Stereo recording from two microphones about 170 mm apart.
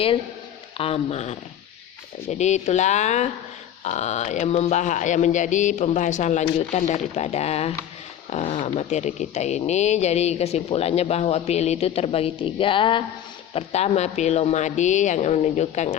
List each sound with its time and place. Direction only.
0.8 s speech: 35° left (ahead or behind)